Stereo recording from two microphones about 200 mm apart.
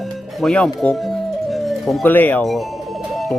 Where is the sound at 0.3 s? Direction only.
5° left (ahead or behind).